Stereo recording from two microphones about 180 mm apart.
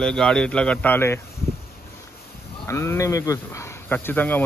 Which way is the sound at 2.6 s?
15° left (ahead or behind).